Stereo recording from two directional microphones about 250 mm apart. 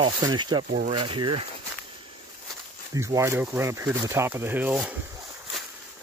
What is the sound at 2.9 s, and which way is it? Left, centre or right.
Speech, centre.